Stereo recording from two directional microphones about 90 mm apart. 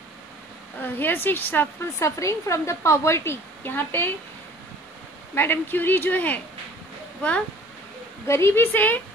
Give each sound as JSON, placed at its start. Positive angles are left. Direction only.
{"t": 0.8, "sound": "speech", "side_deg": 20}
{"t": 2.0, "sound": "a woman's voice", "side_deg": 30}
{"t": 5.3, "sound": "speech", "side_deg": 25}
{"t": 8.3, "sound": "speech", "side_deg": 30}